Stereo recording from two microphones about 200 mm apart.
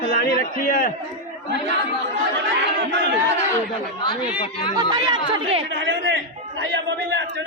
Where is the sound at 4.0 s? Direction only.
25° left (ahead or behind).